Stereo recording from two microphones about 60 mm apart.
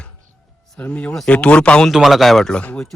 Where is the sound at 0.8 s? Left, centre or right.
Left.